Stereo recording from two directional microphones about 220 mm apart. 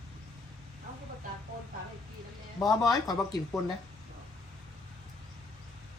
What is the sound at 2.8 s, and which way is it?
Speech, 15° left (ahead or behind).